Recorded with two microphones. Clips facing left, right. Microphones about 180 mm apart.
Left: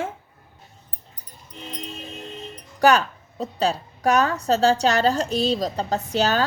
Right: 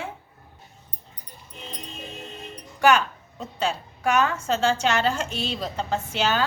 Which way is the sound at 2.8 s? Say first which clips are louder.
Left 2 dB; 35° left (ahead or behind).